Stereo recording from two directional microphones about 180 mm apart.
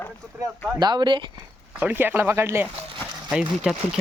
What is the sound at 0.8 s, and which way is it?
Speech, 25° right (ahead or behind).